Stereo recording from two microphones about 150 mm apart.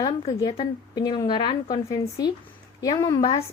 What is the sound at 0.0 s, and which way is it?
A woman's voice, 35° left (ahead or behind).